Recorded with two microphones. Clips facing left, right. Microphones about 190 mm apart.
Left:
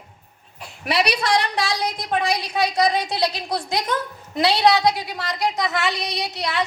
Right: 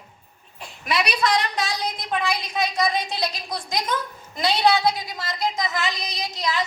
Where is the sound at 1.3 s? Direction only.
70° left (ahead or behind).